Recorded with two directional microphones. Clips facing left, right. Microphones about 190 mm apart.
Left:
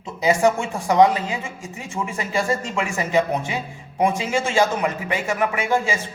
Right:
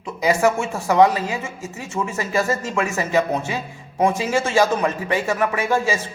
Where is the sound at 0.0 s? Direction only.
20° left (ahead or behind).